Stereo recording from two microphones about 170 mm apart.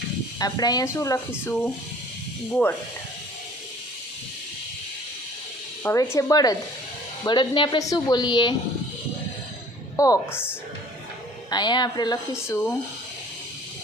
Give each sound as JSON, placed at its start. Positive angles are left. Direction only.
{"t": 0.3, "sound": "a woman's voice", "side_deg": 20}
{"t": 5.8, "sound": "a woman's voice", "side_deg": 15}
{"t": 10.0, "sound": "a woman's voice", "side_deg": 15}
{"t": 11.5, "sound": "a woman's voice", "side_deg": 25}